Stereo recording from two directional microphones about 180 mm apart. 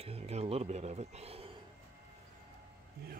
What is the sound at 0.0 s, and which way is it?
Speech, 35° right (ahead or behind).